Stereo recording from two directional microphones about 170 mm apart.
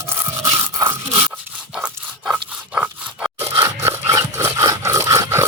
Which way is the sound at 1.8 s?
5° right (ahead or behind).